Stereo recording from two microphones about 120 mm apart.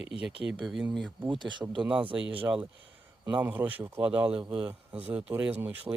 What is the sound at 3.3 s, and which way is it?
Speech, 15° right (ahead or behind).